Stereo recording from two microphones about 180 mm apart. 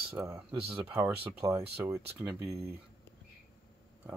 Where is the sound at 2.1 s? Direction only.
10° right (ahead or behind).